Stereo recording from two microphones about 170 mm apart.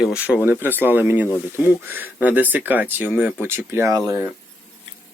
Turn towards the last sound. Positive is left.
turn(degrees=-20)  # may be behind; listen again after turning